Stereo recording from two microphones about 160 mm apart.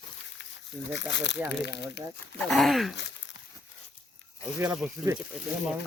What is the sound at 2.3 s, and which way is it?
Speech, centre (ahead or behind).